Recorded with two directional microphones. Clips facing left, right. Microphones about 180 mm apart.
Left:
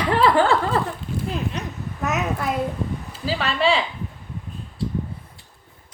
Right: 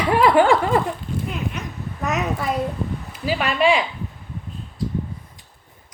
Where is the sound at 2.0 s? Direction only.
Centre (ahead or behind).